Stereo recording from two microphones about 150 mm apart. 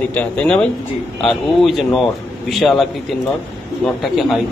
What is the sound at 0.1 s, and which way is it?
A man's voice, 10° left (ahead or behind).